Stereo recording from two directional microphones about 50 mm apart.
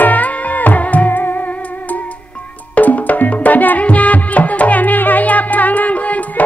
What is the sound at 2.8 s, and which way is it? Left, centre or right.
Music, left.